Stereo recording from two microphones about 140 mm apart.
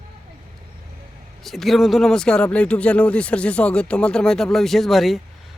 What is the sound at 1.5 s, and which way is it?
Speech, centre (ahead or behind).